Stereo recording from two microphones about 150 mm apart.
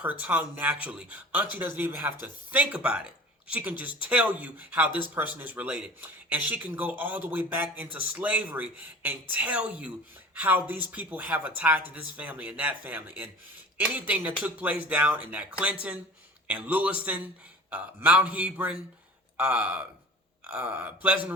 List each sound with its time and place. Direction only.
0.0 s speech: 10° right (ahead or behind)
4.9 s speech: 30° left (ahead or behind)
5.4 s speech: 10° right (ahead or behind)